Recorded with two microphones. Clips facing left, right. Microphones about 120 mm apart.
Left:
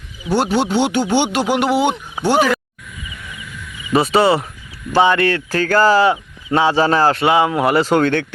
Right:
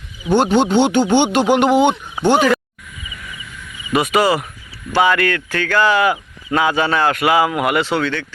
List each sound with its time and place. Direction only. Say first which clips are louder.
0.3 s speech: right 3 dB; 5° left (ahead or behind)
3.9 s speech: left 2 dB; 30° left (ahead or behind); by 8.3 s 50° left (ahead or behind)